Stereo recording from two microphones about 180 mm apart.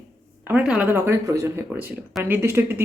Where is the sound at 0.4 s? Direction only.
10° right (ahead or behind).